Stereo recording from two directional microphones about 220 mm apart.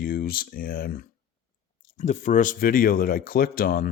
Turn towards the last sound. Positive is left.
turn(degrees=40)  # may be behind; listen again after turning